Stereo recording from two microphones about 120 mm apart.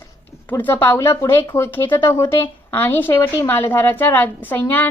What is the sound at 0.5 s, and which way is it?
A woman's voice, 15° left (ahead or behind).